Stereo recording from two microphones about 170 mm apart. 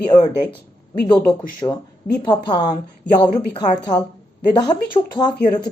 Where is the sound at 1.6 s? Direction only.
25° left (ahead or behind).